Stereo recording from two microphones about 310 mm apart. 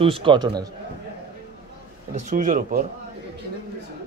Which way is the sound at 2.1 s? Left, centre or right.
Right.